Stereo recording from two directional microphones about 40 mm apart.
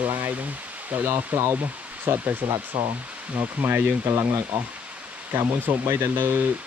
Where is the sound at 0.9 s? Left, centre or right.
Right.